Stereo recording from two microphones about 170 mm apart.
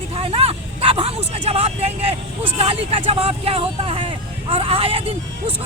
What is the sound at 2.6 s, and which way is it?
Speech, 35° right (ahead or behind).